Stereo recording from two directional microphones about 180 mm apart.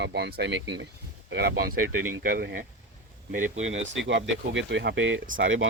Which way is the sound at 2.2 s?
55° right (ahead or behind).